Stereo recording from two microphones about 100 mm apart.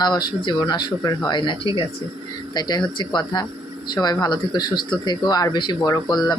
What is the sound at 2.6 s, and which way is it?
Speech, 45° left (ahead or behind).